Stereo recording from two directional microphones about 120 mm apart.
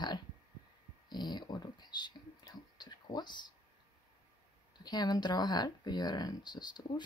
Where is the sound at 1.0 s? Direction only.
35° left (ahead or behind).